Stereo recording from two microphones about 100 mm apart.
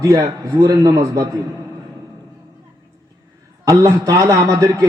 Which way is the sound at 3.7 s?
35° right (ahead or behind).